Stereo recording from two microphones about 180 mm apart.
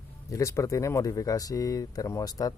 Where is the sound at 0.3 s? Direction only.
15° left (ahead or behind).